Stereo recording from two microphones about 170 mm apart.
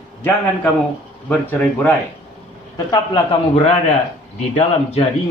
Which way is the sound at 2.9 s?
25° left (ahead or behind).